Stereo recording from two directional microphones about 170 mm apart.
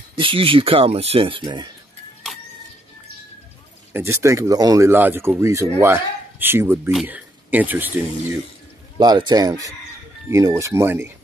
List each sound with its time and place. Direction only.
0.1 s speech: 30° right (ahead or behind)
3.9 s speech: 15° right (ahead or behind)
8.9 s speech: 25° right (ahead or behind)